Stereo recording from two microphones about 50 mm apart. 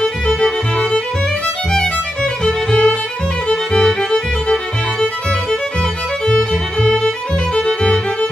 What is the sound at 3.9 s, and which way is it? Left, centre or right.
Violin, centre.